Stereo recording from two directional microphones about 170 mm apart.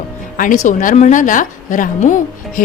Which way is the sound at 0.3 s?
50° left (ahead or behind).